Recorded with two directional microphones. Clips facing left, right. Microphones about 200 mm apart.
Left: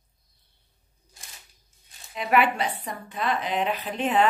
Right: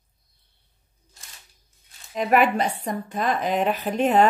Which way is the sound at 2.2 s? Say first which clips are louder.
Right 3 dB; 45° right (ahead or behind).